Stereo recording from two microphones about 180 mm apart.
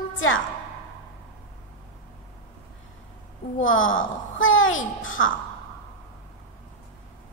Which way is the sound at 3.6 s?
90° left.